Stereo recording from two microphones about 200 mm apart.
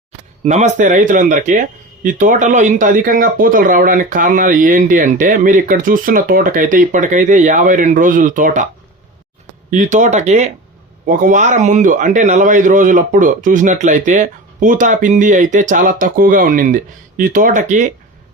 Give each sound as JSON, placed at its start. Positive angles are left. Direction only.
{"t": 0.4, "sound": "speech", "side_deg": -35}
{"t": 9.6, "sound": "speech", "side_deg": -40}